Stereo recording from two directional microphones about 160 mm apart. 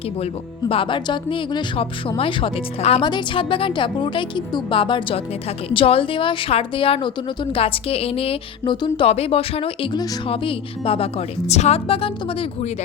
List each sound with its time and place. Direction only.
0.7 s speech: 35° left (ahead or behind)